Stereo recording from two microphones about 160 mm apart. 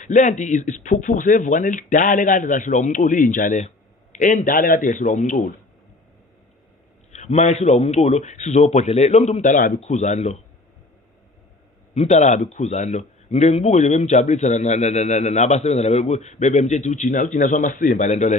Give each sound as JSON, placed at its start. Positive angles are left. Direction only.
{"t": 0.0, "sound": "speech", "side_deg": 50}
{"t": 7.1, "sound": "speech", "side_deg": 45}
{"t": 11.9, "sound": "speech", "side_deg": 45}